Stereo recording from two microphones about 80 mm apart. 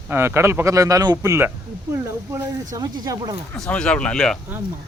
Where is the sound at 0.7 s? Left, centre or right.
Right.